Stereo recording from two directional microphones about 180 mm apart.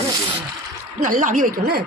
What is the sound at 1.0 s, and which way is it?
Speech, 45° right (ahead or behind).